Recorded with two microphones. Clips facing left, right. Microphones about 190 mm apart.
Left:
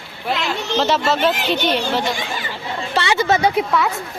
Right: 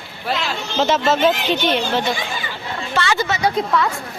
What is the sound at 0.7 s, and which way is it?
Speech, centre (ahead or behind).